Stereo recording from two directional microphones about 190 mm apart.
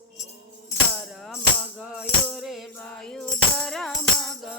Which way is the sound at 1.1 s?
Centre (ahead or behind).